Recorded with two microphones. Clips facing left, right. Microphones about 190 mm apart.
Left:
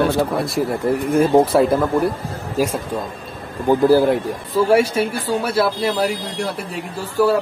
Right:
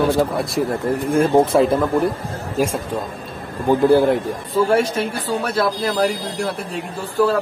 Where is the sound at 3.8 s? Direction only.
Centre (ahead or behind).